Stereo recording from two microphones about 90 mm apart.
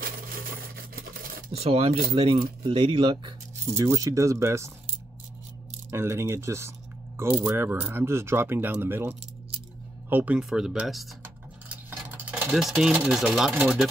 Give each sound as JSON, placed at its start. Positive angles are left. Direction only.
{"t": 1.7, "sound": "speech", "side_deg": -90}
{"t": 2.3, "sound": "speech", "side_deg": -70}
{"t": 3.7, "sound": "speech", "side_deg": -35}
{"t": 5.9, "sound": "speech", "side_deg": -30}
{"t": 11.7, "sound": "a sound", "side_deg": -20}
{"t": 12.5, "sound": "speech", "side_deg": 0}
{"t": 13.5, "sound": "speech", "side_deg": -15}